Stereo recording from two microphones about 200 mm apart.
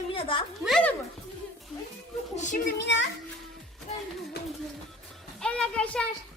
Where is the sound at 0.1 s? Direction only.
25° left (ahead or behind).